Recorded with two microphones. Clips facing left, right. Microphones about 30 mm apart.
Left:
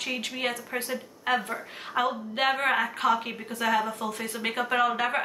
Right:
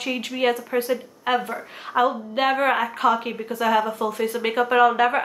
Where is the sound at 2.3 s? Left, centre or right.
Centre.